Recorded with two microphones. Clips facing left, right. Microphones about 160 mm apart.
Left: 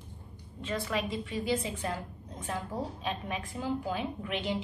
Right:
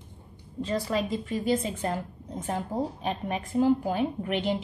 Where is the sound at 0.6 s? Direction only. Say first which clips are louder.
Right 5 dB; 35° right (ahead or behind).